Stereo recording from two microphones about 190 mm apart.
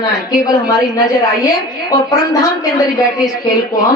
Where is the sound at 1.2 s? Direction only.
20° left (ahead or behind).